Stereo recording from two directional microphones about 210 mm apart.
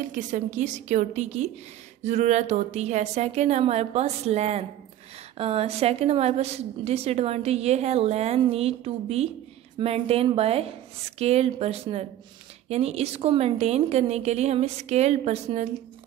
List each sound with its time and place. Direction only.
0.1 s a woman's voice: 35° right (ahead or behind)